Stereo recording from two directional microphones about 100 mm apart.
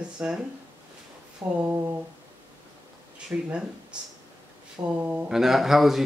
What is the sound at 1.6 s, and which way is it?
Speech, 25° right (ahead or behind).